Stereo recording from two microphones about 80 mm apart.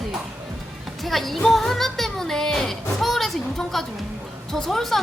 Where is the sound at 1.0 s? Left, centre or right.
Centre.